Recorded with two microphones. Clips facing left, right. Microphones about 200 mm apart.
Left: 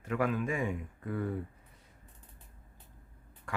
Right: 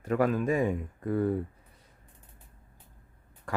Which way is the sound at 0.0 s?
40° right (ahead or behind).